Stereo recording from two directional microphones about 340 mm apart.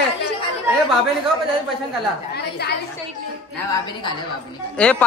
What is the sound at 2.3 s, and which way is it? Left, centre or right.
Speech, left.